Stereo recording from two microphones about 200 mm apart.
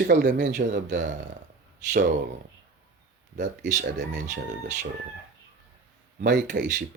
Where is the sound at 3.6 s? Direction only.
40° right (ahead or behind).